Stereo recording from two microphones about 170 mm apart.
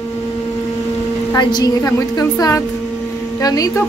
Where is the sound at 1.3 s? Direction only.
25° left (ahead or behind).